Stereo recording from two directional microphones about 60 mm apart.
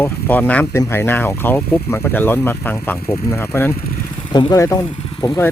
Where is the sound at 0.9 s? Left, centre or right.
Left.